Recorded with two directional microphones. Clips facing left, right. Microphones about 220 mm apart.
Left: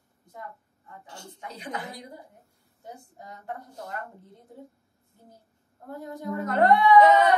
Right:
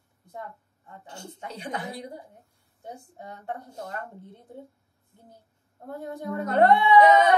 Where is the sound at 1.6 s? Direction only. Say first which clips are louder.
Right 3 dB; 30° right (ahead or behind).